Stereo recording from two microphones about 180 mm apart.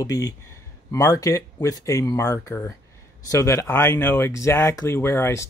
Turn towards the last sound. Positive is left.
turn(degrees=15)  # may be behind; listen again after turning